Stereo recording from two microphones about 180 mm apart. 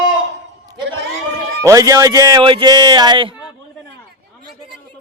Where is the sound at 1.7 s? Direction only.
20° right (ahead or behind).